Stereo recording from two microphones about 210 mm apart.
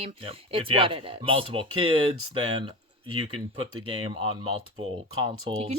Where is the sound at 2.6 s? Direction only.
25° right (ahead or behind).